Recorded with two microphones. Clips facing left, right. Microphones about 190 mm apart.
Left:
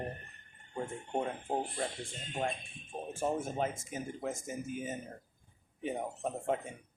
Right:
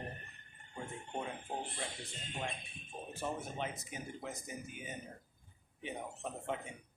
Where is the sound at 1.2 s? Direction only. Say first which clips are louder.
Left 7 dB; 45° left (ahead or behind).